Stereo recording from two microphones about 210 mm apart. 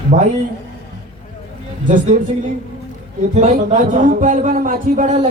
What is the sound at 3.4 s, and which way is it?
Speech, 35° right (ahead or behind).